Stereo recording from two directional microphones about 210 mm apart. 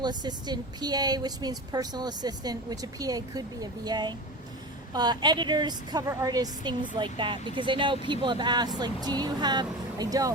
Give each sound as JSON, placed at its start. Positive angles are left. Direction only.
{"t": 0.0, "sound": "a woman's voice", "side_deg": -20}